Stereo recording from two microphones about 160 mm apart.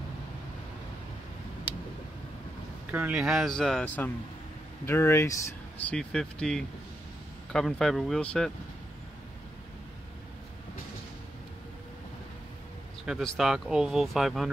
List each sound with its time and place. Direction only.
2.9 s speech: 10° right (ahead or behind)
13.0 s speech: 5° right (ahead or behind)